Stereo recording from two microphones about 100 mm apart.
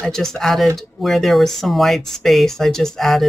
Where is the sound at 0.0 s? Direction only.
5° left (ahead or behind).